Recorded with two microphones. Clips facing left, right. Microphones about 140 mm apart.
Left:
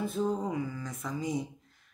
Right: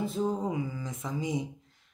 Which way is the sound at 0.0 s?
20° right (ahead or behind).